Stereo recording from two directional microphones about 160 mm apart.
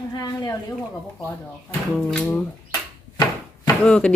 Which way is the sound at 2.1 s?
5° left (ahead or behind).